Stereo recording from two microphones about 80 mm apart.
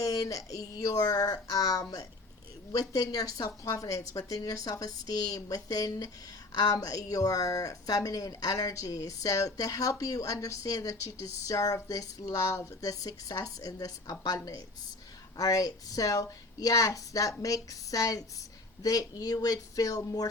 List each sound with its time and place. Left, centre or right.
0.0 s speech: left